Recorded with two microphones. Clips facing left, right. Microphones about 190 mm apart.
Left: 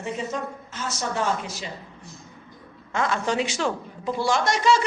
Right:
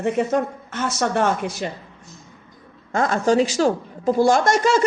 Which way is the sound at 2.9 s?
40° right (ahead or behind).